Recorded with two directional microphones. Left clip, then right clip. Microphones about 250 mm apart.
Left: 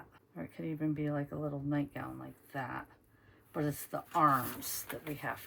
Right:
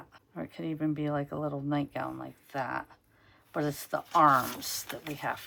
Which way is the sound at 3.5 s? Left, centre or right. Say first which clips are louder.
Right 5 dB; centre.